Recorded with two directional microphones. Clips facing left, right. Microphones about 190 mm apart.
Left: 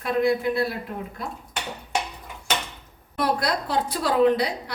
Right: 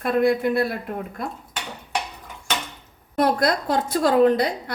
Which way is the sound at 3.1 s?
45° right (ahead or behind).